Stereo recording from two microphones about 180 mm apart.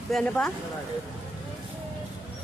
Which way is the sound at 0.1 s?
5° left (ahead or behind).